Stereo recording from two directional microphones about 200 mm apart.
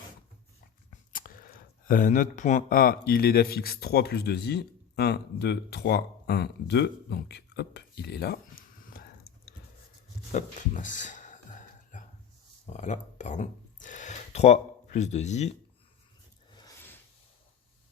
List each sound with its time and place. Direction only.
0.9 s speech: 45° left (ahead or behind)
10.3 s speech: 40° left (ahead or behind)
12.7 s speech: 35° left (ahead or behind)
16.5 s a sound: 20° left (ahead or behind)